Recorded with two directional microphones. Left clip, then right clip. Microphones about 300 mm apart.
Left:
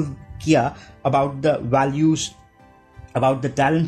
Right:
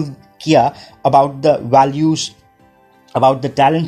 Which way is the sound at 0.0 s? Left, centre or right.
Centre.